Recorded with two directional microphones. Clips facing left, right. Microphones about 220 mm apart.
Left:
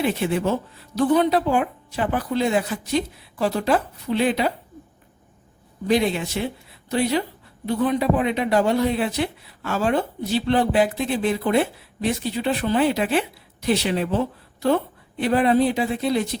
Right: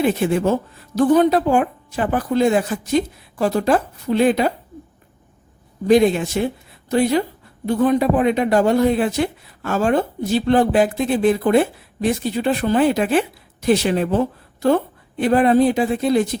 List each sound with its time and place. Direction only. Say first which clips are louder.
0.0 s speech: right 4 dB; 45° right (ahead or behind)
5.9 s speech: right 6 dB; 45° right (ahead or behind)